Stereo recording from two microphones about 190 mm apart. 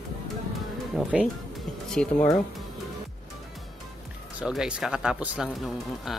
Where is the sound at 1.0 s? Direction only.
Centre (ahead or behind).